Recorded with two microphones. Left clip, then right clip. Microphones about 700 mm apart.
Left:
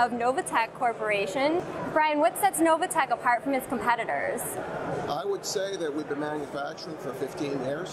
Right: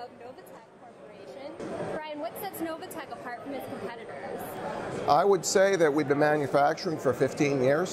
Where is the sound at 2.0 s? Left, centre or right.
Left.